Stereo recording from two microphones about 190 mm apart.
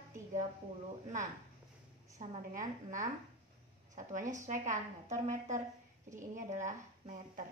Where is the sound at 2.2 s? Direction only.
45° right (ahead or behind).